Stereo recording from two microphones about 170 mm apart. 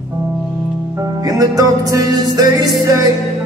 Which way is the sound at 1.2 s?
20° right (ahead or behind).